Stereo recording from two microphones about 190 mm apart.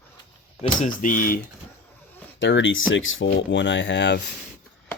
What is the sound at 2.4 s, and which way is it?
Speech, 75° left (ahead or behind).